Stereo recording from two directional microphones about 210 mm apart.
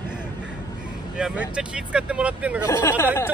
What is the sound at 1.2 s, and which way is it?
Speech, 5° right (ahead or behind).